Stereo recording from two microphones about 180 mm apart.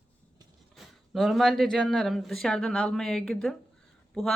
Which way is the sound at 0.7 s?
Centre (ahead or behind).